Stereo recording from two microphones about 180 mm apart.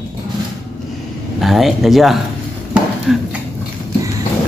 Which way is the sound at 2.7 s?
Centre (ahead or behind).